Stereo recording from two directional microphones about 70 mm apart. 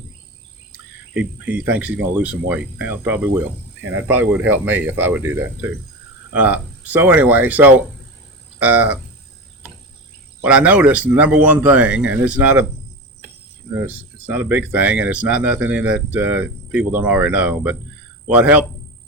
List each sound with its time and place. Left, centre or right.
1.1 s speech: centre
10.4 s speech: centre
13.7 s speech: right